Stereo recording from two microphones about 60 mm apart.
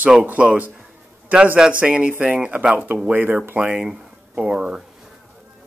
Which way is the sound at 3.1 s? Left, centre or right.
Right.